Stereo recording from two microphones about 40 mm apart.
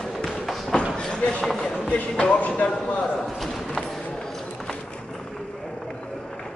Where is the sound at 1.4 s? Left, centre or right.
Centre.